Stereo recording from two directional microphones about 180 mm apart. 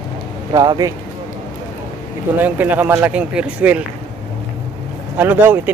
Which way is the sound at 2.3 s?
10° right (ahead or behind).